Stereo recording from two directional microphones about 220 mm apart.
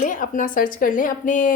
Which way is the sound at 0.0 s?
35° left (ahead or behind).